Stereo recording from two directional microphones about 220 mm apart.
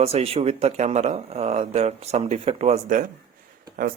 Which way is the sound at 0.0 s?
30° right (ahead or behind).